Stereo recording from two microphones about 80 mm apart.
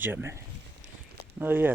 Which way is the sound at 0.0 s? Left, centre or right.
Right.